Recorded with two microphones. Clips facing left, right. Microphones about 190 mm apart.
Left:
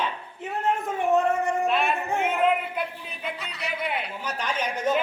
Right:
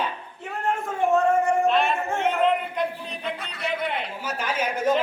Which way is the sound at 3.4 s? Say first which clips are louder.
Right 1 dB; 55° right (ahead or behind).